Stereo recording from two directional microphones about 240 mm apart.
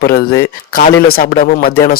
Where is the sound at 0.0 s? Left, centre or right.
Left.